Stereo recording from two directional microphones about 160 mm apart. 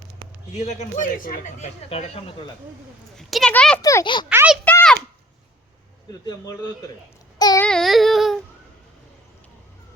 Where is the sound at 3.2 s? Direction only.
Centre (ahead or behind).